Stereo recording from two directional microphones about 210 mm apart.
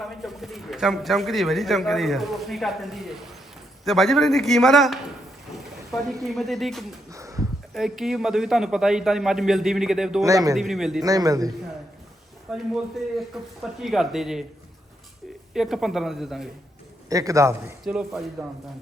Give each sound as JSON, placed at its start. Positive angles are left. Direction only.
{"t": 0.0, "sound": "a man's voice", "side_deg": 0}
{"t": 6.2, "sound": "a man's voice", "side_deg": 0}
{"t": 7.1, "sound": "a sound", "side_deg": -15}
{"t": 7.7, "sound": "a man's voice", "side_deg": 0}
{"t": 10.2, "sound": "a man's voice", "side_deg": -15}
{"t": 10.5, "sound": "a man's voice", "side_deg": 0}
{"t": 11.0, "sound": "a man's voice", "side_deg": -15}
{"t": 12.5, "sound": "a man's voice", "side_deg": 0}
{"t": 15.5, "sound": "a man's voice", "side_deg": 0}
{"t": 17.1, "sound": "a man's voice", "side_deg": -15}
{"t": 17.8, "sound": "a man's voice", "side_deg": 0}